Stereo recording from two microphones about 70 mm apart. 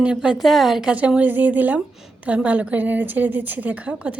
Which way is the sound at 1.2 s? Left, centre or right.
Right.